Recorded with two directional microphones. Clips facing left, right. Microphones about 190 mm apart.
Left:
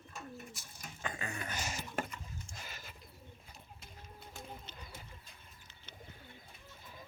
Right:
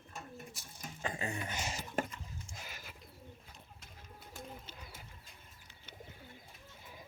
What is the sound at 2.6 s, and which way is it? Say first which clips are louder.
Bird: even; 10° right (ahead or behind).